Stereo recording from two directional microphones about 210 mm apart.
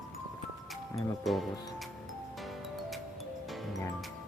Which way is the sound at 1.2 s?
Centre (ahead or behind).